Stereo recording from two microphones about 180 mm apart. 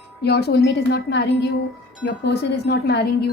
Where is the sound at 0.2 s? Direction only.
65° left (ahead or behind).